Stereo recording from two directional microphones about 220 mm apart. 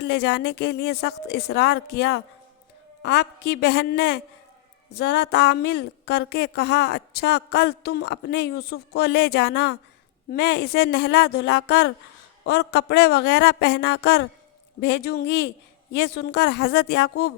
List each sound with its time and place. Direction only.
0.0 s a woman's voice: 50° left (ahead or behind)